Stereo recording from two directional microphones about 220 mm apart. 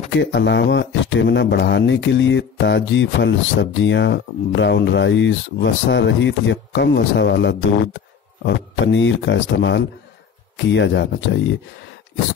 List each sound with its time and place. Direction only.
0.1 s speech: 55° left (ahead or behind)